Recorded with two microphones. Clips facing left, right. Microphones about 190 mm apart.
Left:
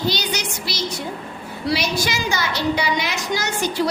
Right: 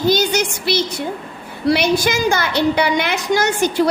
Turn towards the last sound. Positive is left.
turn(degrees=-55)  # may be behind; listen again after turning